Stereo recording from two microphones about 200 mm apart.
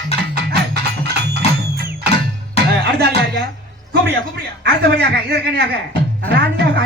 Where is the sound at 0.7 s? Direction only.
55° right (ahead or behind).